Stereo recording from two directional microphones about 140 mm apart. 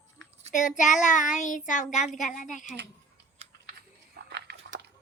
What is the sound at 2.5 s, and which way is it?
Child singing, 65° left (ahead or behind).